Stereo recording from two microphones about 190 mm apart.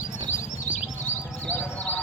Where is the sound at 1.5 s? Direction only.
10° left (ahead or behind).